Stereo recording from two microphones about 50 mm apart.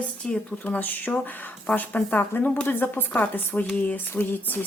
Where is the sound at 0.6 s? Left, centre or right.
Left.